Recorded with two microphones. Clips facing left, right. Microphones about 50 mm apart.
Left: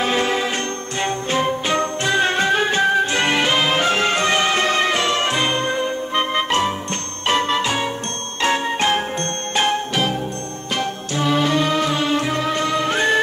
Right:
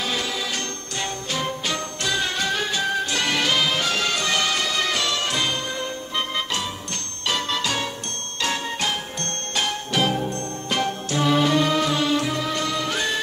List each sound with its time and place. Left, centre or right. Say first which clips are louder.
0.0 s music: left 7 dB; left
8.4 s jingle bell: left 7 dB; left
10.8 s music: left 1 dB; left